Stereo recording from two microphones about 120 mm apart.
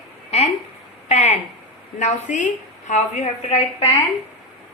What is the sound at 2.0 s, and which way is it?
A woman's voice, 85° left.